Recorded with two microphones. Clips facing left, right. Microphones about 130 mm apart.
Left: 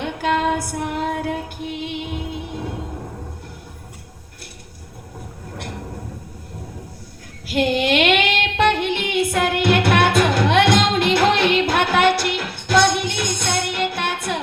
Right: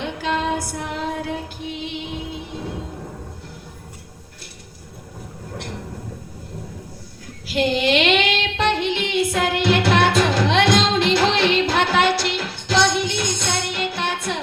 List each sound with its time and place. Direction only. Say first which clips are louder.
0.0 s female singing: left 3 dB; 55° left (ahead or behind)
7.4 s child singing: left 1 dB; 55° left (ahead or behind)